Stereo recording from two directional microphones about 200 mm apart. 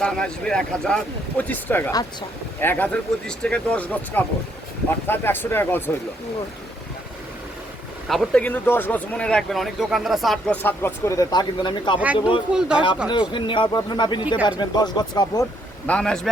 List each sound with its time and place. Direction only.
0.0 s speech: 5° left (ahead or behind)
8.0 s speech: centre (ahead or behind); by 11.9 s 20° left (ahead or behind)
11.9 s speech: 5° right (ahead or behind)
13.1 s speech: 25° left (ahead or behind)
15.9 s speech: 5° left (ahead or behind)